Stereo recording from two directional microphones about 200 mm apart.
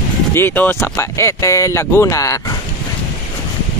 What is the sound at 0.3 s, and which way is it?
Speech, 10° left (ahead or behind).